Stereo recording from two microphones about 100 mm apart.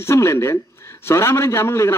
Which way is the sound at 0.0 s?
25° left (ahead or behind).